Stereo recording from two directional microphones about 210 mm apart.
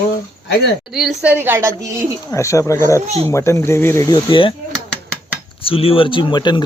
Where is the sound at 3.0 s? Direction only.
30° right (ahead or behind).